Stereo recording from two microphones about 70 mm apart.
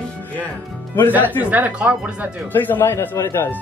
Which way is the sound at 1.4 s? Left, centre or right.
Right.